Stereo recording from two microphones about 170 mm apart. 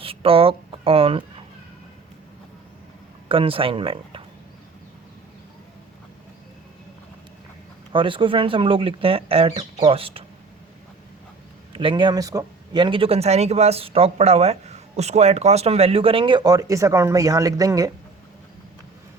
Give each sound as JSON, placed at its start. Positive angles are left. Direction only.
{"t": 0.0, "sound": "a sound", "side_deg": -30}
{"t": 3.2, "sound": "speech", "side_deg": -30}
{"t": 7.9, "sound": "speech", "side_deg": -30}
{"t": 11.7, "sound": "speech", "side_deg": -30}